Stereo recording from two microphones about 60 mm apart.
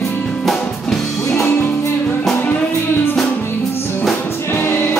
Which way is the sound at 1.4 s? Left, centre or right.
Left.